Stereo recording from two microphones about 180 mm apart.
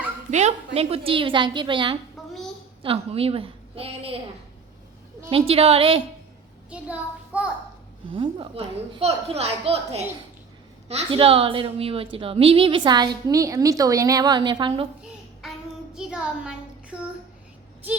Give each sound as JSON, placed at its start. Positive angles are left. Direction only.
{"t": 0.3, "sound": "a woman's voice", "side_deg": -40}
{"t": 2.2, "sound": "a sound", "side_deg": 0}
{"t": 2.8, "sound": "a woman's voice", "side_deg": -30}
{"t": 5.3, "sound": "a woman's voice", "side_deg": -30}
{"t": 6.7, "sound": "a child's voice", "side_deg": -5}
{"t": 8.1, "sound": "a woman's voice", "side_deg": -30}
{"t": 15.4, "sound": "child singing", "side_deg": 0}
{"t": 16.0, "sound": "a child's voice", "side_deg": -5}